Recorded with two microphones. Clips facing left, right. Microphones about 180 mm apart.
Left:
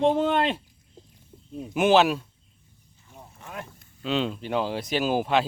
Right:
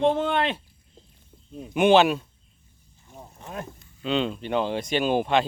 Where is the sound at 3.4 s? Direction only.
30° right (ahead or behind).